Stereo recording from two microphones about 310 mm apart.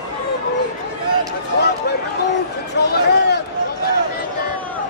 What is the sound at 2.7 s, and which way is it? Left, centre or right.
Speech, left.